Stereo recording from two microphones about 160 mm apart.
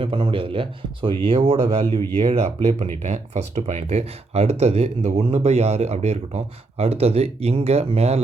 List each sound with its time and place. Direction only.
0.0 s speech: 35° right (ahead or behind)